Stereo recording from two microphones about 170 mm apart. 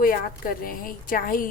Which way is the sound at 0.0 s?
55° left (ahead or behind).